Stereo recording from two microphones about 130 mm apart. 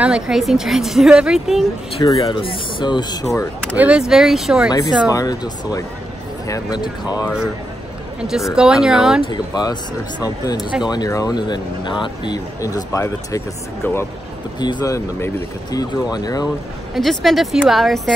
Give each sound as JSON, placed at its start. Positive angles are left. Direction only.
{"t": 0.0, "sound": "a woman's voice", "side_deg": -5}
{"t": 2.0, "sound": "speech", "side_deg": 25}
{"t": 3.7, "sound": "a woman's voice", "side_deg": -10}
{"t": 4.6, "sound": "speech", "side_deg": 30}
{"t": 8.2, "sound": "a woman's voice", "side_deg": -5}
{"t": 9.2, "sound": "speech", "side_deg": 35}
{"t": 10.6, "sound": "a woman's voice", "side_deg": -5}
{"t": 10.9, "sound": "speech", "side_deg": 30}
{"t": 14.6, "sound": "speech", "side_deg": 30}
{"t": 16.9, "sound": "a woman's voice", "side_deg": 0}